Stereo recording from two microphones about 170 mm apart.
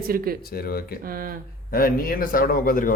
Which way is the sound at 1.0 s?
60° right (ahead or behind).